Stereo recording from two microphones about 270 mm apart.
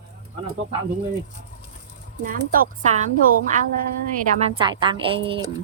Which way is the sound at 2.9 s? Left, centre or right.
Right.